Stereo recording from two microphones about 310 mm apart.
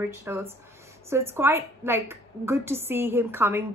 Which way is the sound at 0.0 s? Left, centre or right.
Centre.